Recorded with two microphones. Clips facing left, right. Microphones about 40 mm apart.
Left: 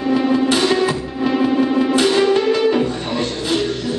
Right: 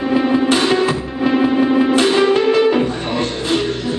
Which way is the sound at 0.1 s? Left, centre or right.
Centre.